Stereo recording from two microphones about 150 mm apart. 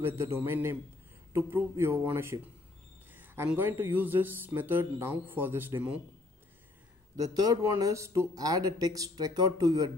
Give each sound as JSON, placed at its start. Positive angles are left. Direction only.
{"t": 0.0, "sound": "speech", "side_deg": -15}
{"t": 7.2, "sound": "speech", "side_deg": -25}